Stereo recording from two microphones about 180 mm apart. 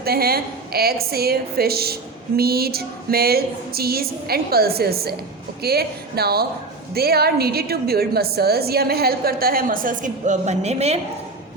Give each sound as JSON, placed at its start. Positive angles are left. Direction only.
{"t": 0.0, "sound": "a woman's voice", "side_deg": -60}